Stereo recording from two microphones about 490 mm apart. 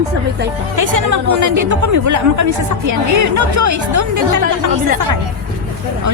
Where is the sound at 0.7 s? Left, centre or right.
Right.